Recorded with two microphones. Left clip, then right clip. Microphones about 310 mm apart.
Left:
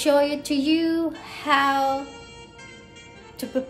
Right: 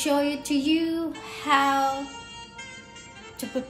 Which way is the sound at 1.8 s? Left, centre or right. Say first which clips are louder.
Left 2 dB; centre.